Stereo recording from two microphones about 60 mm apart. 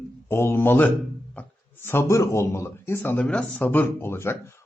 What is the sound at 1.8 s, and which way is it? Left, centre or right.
Speech, left.